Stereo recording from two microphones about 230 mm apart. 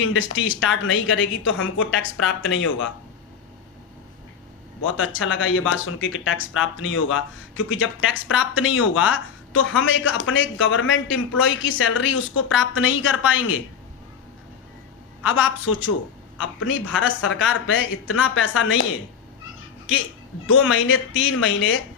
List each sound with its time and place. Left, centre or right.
0.0 s speech: left
4.8 s speech: left
15.2 s speech: left
19.9 s speech: left